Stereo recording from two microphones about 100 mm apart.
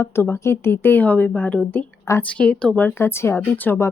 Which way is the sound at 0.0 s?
25° left (ahead or behind).